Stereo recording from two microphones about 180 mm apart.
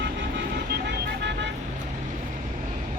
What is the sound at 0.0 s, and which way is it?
Vehicle, 80° right.